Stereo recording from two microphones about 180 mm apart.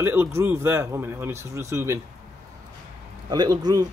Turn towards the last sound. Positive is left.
turn(degrees=-20)  # may be behind; listen again after turning